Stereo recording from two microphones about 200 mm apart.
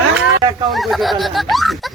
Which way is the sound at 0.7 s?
Centre (ahead or behind).